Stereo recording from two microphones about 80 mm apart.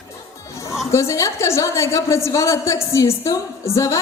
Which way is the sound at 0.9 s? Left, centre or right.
Left.